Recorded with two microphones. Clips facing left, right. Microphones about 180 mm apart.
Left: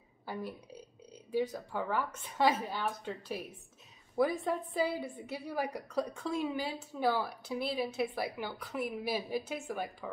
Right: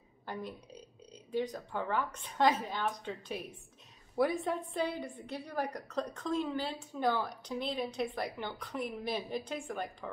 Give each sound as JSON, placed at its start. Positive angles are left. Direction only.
{"t": 0.3, "sound": "a woman's voice", "side_deg": 5}